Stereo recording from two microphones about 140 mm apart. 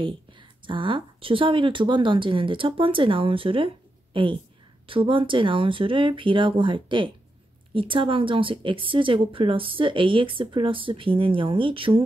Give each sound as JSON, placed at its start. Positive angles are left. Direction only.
{"t": 0.0, "sound": "speech", "side_deg": -35}